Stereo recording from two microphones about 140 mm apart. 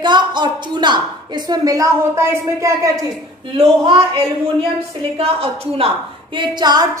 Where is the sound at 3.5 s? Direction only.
45° right (ahead or behind).